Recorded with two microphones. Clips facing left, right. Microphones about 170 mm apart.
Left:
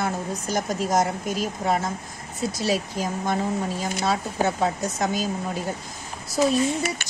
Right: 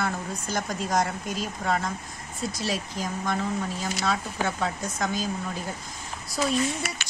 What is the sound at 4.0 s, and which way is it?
Speech, 30° left (ahead or behind).